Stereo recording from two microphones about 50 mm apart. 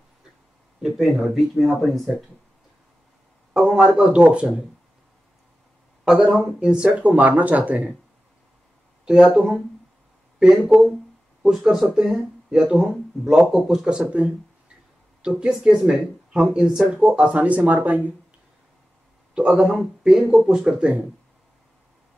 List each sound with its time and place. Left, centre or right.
0.8 s speech: centre
3.5 s speech: centre
6.0 s speech: centre
7.0 s speech: right
9.0 s speech: centre
10.4 s speech: centre; by 18.1 s right
19.3 s speech: centre